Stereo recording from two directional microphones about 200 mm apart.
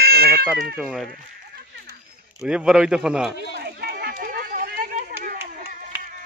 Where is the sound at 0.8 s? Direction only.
Centre (ahead or behind).